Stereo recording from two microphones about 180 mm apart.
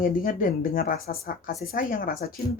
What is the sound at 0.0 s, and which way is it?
Speech, 50° left (ahead or behind).